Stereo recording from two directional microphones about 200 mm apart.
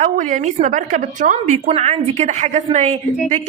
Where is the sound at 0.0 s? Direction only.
40° right (ahead or behind).